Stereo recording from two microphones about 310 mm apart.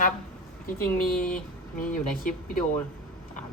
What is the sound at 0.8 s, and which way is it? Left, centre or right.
Speech, left.